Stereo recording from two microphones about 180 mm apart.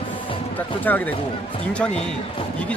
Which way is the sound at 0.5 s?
10° left (ahead or behind).